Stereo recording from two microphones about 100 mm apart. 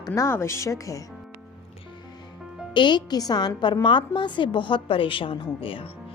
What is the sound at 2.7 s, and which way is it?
A woman's voice, 50° left (ahead or behind).